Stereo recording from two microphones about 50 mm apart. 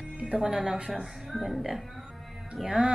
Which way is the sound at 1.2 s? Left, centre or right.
Centre.